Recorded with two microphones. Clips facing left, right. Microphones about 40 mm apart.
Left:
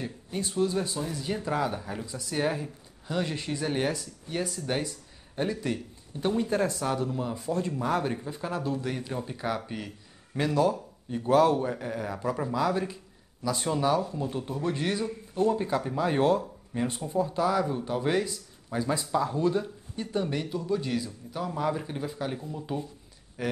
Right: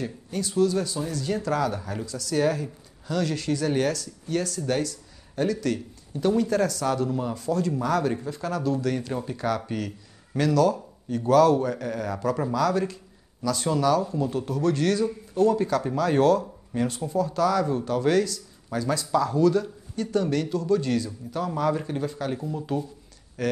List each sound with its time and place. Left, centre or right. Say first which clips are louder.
0.0 s speech: right 3 dB; left
0.7 s speech: right 3 dB; left
22.3 s speech: right 6 dB; centre
23.4 s speech: right 5 dB; centre